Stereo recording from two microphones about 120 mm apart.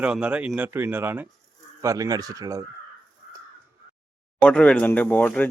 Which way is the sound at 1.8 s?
30° right (ahead or behind).